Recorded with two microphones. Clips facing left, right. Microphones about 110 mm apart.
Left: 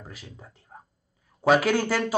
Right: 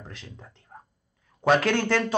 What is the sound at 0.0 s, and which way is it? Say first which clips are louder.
Speech: even; 5° left (ahead or behind).